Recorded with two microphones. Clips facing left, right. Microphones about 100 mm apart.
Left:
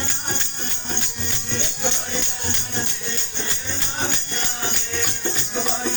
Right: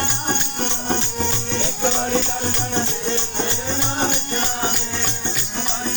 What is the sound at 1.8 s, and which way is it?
Music, 70° right (ahead or behind).